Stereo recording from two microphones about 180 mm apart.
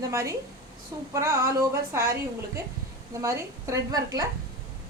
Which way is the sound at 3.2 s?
15° right (ahead or behind).